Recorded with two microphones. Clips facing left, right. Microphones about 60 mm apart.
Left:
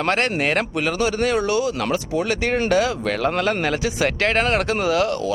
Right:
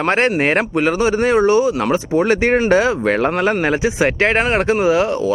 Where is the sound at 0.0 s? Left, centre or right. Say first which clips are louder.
Right 5 dB; right.